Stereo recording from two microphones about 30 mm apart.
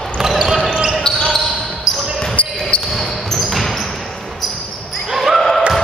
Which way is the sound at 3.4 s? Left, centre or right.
Centre.